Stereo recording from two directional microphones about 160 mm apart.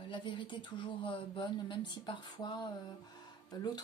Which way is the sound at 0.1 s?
30° left (ahead or behind).